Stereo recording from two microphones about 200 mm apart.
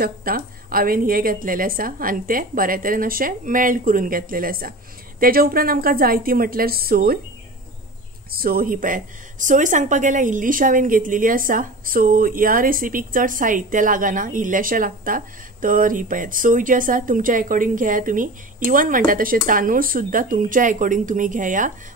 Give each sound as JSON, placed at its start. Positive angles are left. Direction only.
{"t": 0.0, "sound": "speech", "side_deg": -45}
{"t": 8.3, "sound": "speech", "side_deg": -45}